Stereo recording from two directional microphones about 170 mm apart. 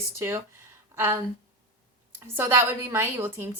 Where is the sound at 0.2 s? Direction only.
15° right (ahead or behind).